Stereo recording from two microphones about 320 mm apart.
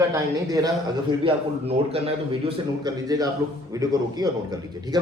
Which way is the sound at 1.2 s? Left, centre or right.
Centre.